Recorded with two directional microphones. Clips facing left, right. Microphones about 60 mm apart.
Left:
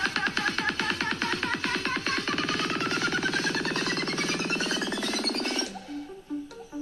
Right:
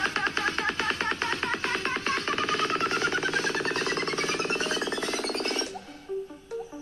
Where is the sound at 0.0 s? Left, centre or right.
Right.